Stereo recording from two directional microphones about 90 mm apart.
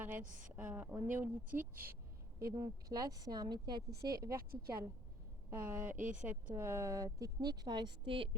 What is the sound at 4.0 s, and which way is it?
Speech, 35° right (ahead or behind).